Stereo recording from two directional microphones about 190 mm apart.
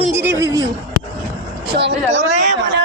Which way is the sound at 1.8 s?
65° right (ahead or behind).